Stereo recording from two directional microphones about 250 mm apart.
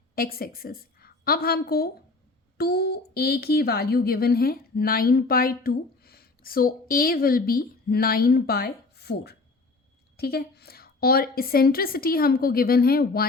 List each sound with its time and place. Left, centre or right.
0.2 s a woman's voice: left